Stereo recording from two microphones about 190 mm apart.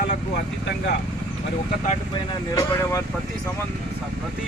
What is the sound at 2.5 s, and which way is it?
Speech, 15° left (ahead or behind).